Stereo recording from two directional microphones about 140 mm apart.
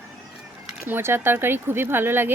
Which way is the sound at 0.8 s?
15° right (ahead or behind).